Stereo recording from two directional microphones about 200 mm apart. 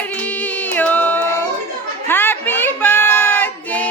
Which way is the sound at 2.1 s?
10° left (ahead or behind).